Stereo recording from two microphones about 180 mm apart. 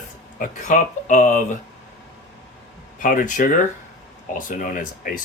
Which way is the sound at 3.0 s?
50° left (ahead or behind).